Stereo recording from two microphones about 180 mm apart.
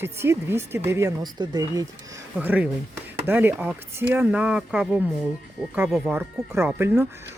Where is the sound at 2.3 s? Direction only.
10° right (ahead or behind).